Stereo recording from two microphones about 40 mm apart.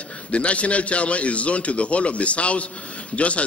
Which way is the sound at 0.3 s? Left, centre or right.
Left.